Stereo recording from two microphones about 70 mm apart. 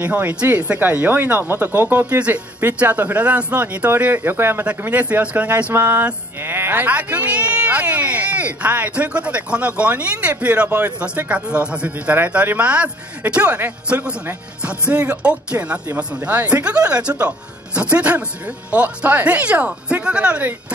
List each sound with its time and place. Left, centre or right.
0.0 s speech: right